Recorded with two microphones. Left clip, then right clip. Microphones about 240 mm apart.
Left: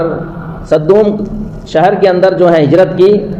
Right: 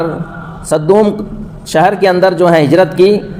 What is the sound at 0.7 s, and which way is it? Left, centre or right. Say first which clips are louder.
A man's voice: left 2 dB; right.